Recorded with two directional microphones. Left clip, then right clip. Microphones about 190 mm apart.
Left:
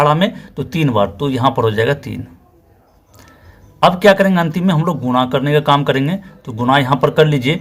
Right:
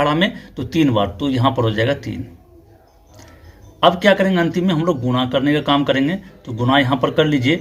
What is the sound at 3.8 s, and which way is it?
A man's voice, 40° left (ahead or behind).